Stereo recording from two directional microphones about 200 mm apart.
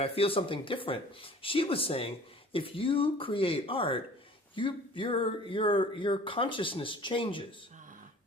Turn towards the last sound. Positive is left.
turn(degrees=-40)  # may be behind; listen again after turning